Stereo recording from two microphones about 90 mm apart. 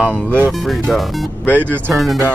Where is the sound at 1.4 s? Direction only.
15° left (ahead or behind).